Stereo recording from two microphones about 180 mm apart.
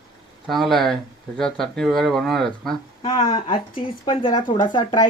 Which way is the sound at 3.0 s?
20° left (ahead or behind).